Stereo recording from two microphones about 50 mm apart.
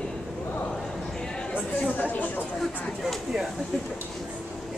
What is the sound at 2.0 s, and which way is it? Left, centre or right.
Chatter, left.